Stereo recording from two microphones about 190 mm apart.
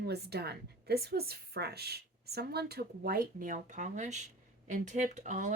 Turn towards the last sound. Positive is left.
turn(degrees=-40)  # may be behind; listen again after turning